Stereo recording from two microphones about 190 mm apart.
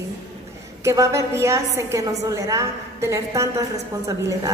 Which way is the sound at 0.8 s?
15° right (ahead or behind).